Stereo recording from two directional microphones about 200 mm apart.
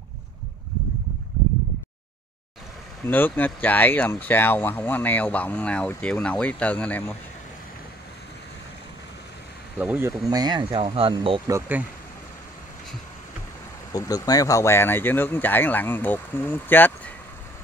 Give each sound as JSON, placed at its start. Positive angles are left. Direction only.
{"t": 3.1, "sound": "speech", "side_deg": 10}
{"t": 9.8, "sound": "speech", "side_deg": -10}
{"t": 13.9, "sound": "speech", "side_deg": 15}